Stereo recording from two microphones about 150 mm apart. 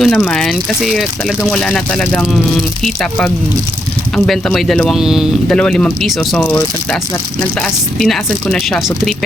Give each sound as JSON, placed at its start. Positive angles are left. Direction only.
{"t": 0.0, "sound": "speech", "side_deg": 5}
{"t": 5.5, "sound": "speech", "side_deg": 5}